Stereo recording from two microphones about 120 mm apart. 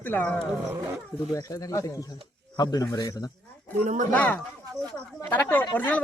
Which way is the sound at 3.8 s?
80° right.